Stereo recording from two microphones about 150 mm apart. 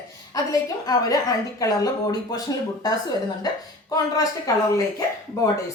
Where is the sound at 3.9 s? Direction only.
20° left (ahead or behind).